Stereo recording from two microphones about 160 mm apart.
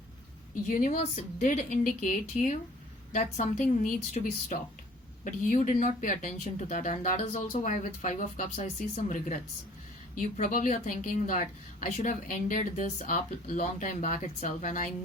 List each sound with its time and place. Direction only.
0.7 s a woman's voice: 55° left (ahead or behind)